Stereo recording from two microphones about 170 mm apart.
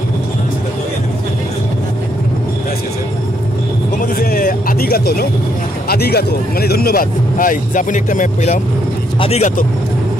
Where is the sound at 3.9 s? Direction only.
60° left (ahead or behind).